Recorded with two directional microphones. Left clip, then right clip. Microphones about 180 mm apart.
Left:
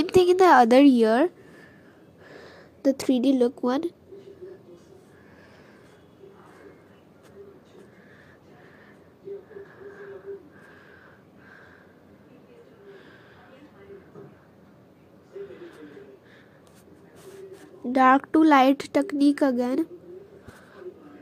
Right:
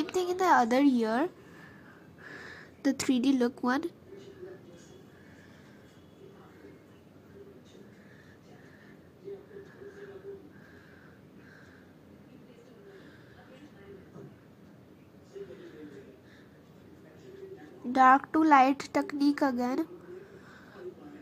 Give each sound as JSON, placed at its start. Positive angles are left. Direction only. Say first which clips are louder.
{"t": 0.1, "sound": "speech", "louder": "left 9 dB", "side_deg": 35}
{"t": 2.2, "sound": "speech", "louder": "right 1 dB", "side_deg": 5}
{"t": 17.9, "sound": "speech", "louder": "left 3 dB", "side_deg": 15}